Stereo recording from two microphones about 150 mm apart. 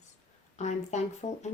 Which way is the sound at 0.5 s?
50° left (ahead or behind).